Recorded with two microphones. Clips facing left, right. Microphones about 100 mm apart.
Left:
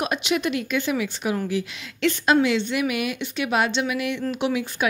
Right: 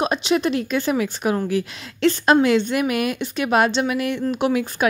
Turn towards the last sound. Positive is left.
turn(degrees=-45)  # may be behind; listen again after turning